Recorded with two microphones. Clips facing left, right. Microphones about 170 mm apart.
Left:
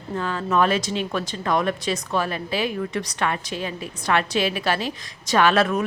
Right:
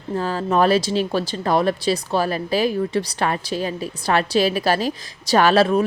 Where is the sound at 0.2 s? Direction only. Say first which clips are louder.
Right 3 dB; 35° right (ahead or behind).